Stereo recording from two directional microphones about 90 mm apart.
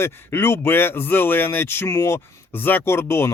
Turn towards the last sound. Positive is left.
turn(degrees=30)  # may be behind; listen again after turning